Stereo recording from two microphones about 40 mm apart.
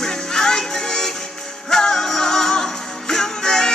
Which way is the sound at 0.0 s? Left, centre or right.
Centre.